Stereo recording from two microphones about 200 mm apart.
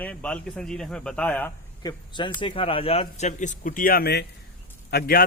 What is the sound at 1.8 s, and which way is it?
A man's voice, 20° left (ahead or behind).